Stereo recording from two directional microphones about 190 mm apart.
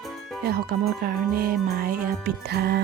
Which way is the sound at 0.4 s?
55° right (ahead or behind).